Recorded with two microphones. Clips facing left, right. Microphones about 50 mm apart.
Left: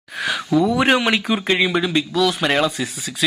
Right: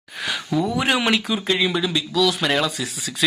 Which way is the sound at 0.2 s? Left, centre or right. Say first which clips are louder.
Left 5 dB; centre.